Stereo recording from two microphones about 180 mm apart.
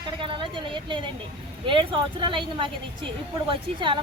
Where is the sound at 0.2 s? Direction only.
25° right (ahead or behind).